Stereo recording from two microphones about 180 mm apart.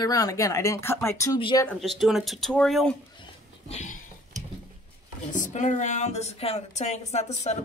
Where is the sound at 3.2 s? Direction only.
35° left (ahead or behind).